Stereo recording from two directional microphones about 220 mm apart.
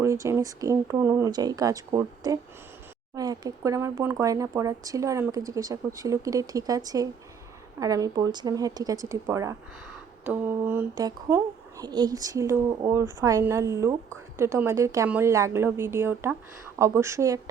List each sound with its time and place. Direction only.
0.0 s speech: 15° right (ahead or behind)